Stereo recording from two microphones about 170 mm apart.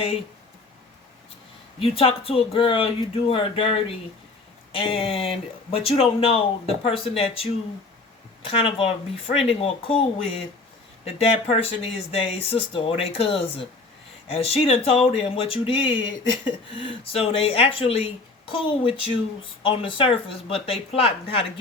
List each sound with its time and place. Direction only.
1.8 s speech: 35° left (ahead or behind)
11.0 s speech: 35° left (ahead or behind)